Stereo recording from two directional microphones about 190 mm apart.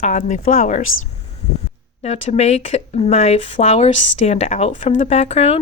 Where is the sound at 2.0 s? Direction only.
35° left (ahead or behind).